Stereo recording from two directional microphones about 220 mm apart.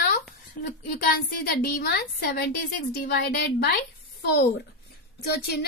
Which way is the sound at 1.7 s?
45° left (ahead or behind).